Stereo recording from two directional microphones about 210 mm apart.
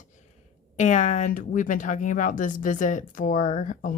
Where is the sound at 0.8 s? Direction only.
35° left (ahead or behind).